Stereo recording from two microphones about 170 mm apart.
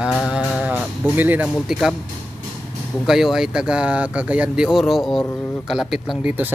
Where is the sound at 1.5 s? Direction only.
Centre (ahead or behind).